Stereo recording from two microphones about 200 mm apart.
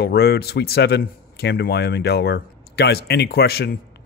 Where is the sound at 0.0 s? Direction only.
55° left (ahead or behind).